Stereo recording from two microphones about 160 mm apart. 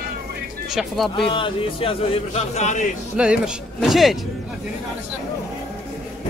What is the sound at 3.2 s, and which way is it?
Speech, 5° right (ahead or behind).